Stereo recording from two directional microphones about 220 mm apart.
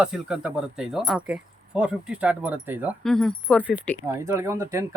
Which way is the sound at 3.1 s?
5° left (ahead or behind).